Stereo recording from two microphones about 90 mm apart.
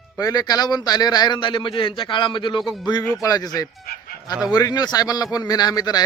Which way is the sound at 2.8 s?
50° left (ahead or behind).